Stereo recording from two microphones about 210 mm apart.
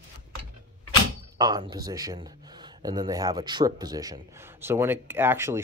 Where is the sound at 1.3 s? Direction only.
20° right (ahead or behind).